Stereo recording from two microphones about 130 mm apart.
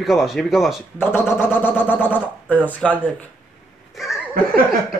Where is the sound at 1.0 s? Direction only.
15° left (ahead or behind).